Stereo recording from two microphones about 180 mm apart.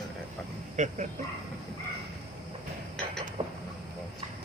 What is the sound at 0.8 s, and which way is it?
Speech, 45° right (ahead or behind).